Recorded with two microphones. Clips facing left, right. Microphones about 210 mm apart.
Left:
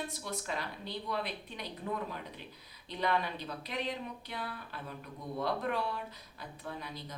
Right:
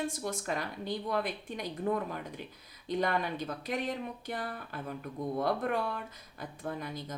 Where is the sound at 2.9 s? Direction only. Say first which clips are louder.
Right 3 dB; 45° right (ahead or behind).